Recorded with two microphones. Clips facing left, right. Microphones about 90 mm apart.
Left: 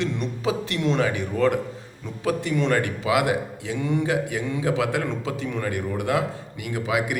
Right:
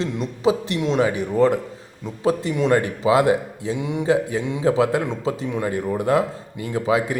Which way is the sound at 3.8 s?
15° right (ahead or behind).